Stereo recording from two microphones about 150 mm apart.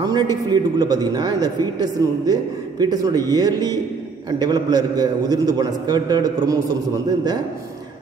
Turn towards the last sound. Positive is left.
turn(degrees=-25)  # may be behind; listen again after turning